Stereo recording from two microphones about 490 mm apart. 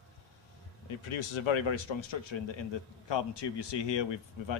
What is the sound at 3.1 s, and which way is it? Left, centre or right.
A man's voice, left.